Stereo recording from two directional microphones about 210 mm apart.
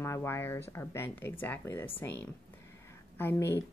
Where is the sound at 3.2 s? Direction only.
10° left (ahead or behind).